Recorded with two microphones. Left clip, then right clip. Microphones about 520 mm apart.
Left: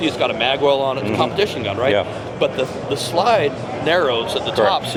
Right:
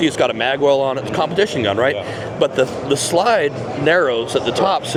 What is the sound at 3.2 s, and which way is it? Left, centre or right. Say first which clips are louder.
Speech: left 1 dB; right.